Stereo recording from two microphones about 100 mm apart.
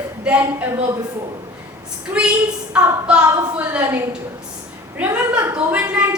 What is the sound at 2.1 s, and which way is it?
A woman's voice, 15° right (ahead or behind).